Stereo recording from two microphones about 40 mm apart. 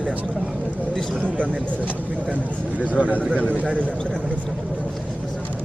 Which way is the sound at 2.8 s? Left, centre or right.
Right.